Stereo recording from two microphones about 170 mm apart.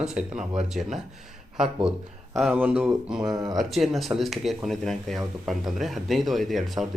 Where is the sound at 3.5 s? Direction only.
Centre (ahead or behind).